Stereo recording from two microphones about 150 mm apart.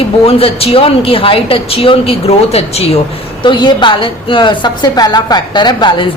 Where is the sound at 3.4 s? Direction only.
30° left (ahead or behind).